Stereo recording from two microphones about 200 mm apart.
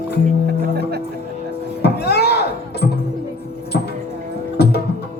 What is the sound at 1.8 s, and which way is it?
Music, 55° left (ahead or behind).